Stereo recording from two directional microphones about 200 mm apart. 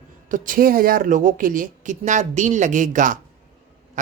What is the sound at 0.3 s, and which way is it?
Speech, 40° right (ahead or behind).